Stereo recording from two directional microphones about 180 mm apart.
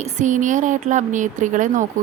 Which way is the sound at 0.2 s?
45° right (ahead or behind).